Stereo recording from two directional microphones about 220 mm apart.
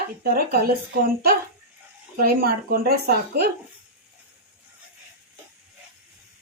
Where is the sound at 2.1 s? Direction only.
45° right (ahead or behind).